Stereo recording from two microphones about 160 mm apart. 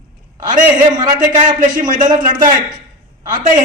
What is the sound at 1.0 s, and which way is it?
A man's voice, 50° right (ahead or behind).